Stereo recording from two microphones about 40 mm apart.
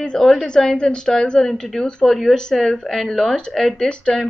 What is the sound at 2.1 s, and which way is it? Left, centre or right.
A woman's voice, centre.